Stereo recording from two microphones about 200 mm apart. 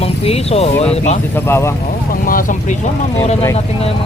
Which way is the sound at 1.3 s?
10° left (ahead or behind).